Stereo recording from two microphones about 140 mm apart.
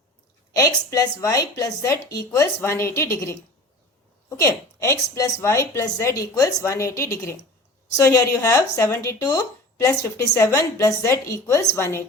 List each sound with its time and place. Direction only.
0.5 s speech: 25° left (ahead or behind)